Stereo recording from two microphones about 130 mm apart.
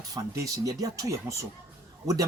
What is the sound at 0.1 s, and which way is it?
Speech, 25° right (ahead or behind).